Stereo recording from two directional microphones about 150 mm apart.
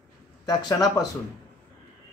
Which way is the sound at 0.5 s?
25° left (ahead or behind).